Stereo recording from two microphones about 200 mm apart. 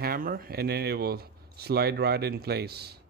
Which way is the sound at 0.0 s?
50° right (ahead or behind).